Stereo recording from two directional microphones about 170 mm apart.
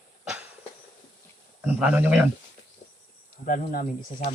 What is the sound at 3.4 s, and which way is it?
Speech, 55° left (ahead or behind).